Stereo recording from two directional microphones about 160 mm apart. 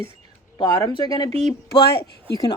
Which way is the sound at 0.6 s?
30° left (ahead or behind).